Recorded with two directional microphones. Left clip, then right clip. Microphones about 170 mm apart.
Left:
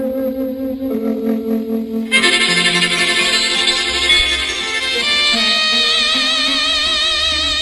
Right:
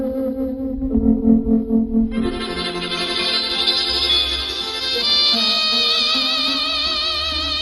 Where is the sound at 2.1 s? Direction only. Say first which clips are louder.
Left 12 dB; 15° left (ahead or behind).